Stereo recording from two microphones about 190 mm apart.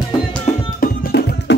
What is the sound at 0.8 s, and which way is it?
Music, 60° left (ahead or behind).